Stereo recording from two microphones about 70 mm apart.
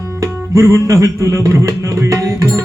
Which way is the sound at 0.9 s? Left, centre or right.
Right.